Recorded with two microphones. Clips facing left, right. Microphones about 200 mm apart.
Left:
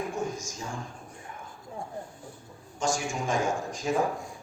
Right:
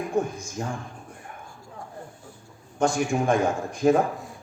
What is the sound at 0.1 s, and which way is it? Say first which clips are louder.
Speech: right 6 dB; 55° right (ahead or behind).